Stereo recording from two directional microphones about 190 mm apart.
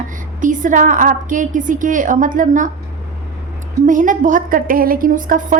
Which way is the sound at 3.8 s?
40° right (ahead or behind).